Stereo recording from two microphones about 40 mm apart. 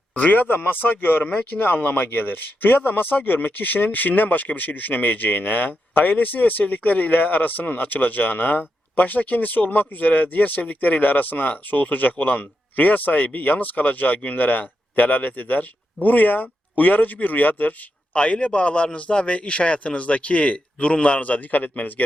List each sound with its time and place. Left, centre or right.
0.1 s a man's voice: left